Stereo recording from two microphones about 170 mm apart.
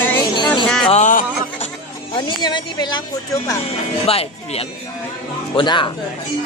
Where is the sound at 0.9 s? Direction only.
45° left (ahead or behind).